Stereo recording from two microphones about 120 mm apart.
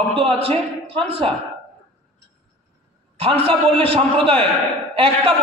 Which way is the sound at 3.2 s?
55° right (ahead or behind).